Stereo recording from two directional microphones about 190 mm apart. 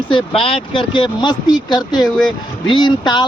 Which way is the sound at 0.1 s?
25° left (ahead or behind).